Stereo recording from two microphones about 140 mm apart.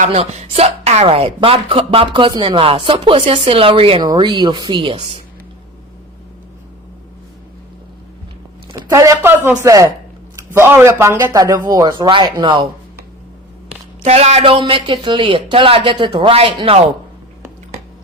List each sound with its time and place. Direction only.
0.1 s speech: 45° right (ahead or behind)
8.8 s speech: 20° right (ahead or behind)
14.0 s speech: 50° right (ahead or behind)